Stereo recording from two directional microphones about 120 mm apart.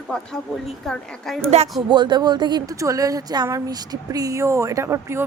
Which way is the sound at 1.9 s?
40° right (ahead or behind).